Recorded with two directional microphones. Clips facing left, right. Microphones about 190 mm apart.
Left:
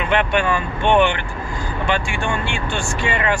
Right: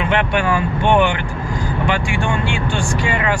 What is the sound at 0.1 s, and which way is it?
Speech, 10° right (ahead or behind).